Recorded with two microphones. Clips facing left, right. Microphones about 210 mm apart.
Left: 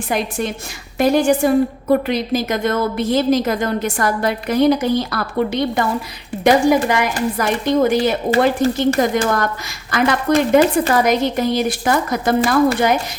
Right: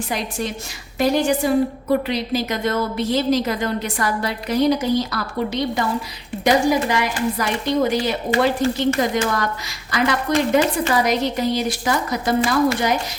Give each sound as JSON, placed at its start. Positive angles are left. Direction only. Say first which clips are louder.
{"t": 0.1, "sound": "a woman's voice", "louder": "left 7 dB", "side_deg": 55}